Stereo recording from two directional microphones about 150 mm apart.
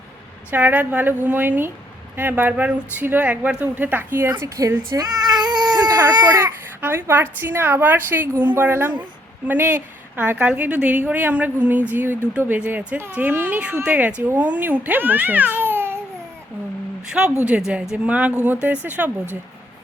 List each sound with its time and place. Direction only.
0.5 s speech: 10° right (ahead or behind)
17.1 s speech: 5° right (ahead or behind)